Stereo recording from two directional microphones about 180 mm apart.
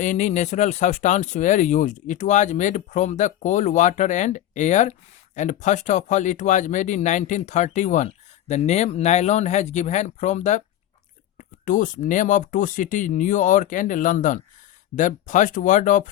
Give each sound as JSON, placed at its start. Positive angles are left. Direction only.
{"t": 0.0, "sound": "speech", "side_deg": 40}
{"t": 11.6, "sound": "speech", "side_deg": 45}